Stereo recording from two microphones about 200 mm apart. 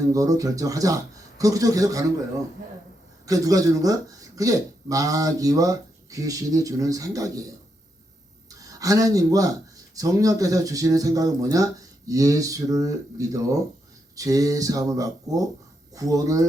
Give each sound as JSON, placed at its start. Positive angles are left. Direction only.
{"t": 0.0, "sound": "speech", "side_deg": -15}
{"t": 3.2, "sound": "speech", "side_deg": -15}